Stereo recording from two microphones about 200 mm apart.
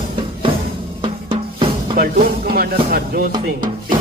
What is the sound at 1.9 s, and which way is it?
Music, 50° right (ahead or behind).